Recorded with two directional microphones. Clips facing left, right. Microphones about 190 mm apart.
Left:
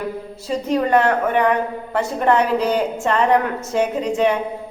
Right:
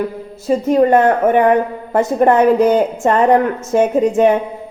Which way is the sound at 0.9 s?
45° right (ahead or behind).